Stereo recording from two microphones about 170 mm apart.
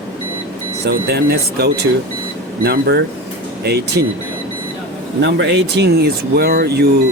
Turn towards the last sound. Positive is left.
turn(degrees=-70)  # may be behind; listen again after turning